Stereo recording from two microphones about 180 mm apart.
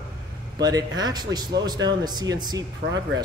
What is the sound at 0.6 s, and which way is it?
Speech, 20° right (ahead or behind).